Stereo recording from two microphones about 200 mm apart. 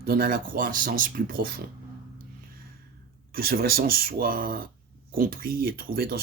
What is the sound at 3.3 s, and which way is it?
A man's voice, 50° right (ahead or behind).